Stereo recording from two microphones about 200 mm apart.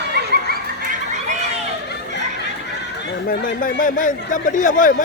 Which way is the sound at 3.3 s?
45° left (ahead or behind).